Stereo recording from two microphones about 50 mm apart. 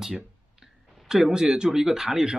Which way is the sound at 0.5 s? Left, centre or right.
Centre.